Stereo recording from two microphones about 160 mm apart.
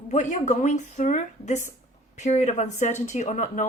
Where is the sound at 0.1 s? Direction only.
45° left (ahead or behind).